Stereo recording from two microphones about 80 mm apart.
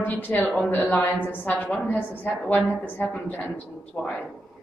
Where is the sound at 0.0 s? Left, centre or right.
Left.